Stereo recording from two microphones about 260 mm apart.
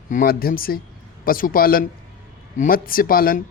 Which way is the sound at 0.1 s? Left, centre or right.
Left.